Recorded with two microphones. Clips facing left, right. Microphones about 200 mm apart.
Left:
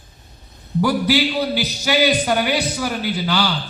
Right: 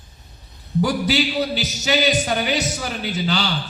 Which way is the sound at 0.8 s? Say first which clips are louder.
Left 2 dB; 55° left (ahead or behind).